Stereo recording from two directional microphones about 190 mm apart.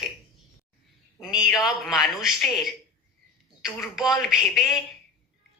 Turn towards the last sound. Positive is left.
turn(degrees=-5)  # may be behind; listen again after turning